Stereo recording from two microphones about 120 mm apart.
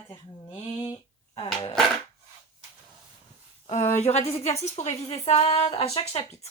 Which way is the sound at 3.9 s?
65° left (ahead or behind).